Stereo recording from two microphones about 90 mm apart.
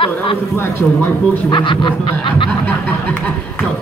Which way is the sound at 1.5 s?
60° left (ahead or behind).